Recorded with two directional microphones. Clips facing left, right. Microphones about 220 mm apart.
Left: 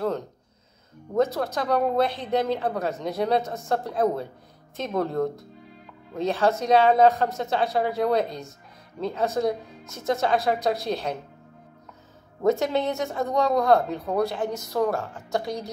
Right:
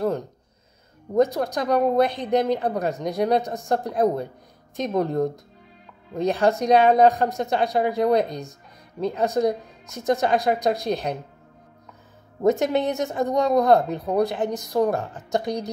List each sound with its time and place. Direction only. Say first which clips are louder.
1.1 s a woman's voice: right 3 dB; 15° right (ahead or behind)
12.4 s speech: right 2 dB; 20° right (ahead or behind)